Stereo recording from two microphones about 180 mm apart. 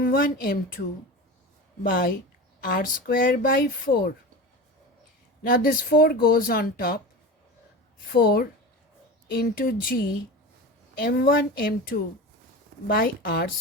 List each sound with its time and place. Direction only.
0.0 s speech: 55° left (ahead or behind)
1.8 s speech: 55° left (ahead or behind)
5.4 s speech: 50° left (ahead or behind)
8.1 s speech: 60° left (ahead or behind)